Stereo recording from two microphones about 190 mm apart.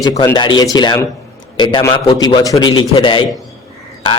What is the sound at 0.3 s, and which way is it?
A man's voice, 25° left (ahead or behind).